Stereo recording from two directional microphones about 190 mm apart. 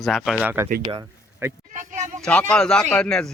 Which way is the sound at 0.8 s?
15° right (ahead or behind).